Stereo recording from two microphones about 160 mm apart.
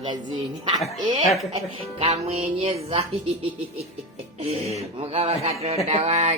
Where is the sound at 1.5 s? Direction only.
40° right (ahead or behind).